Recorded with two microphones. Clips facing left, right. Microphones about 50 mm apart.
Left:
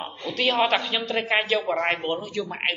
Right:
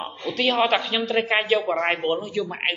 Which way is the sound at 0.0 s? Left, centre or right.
Centre.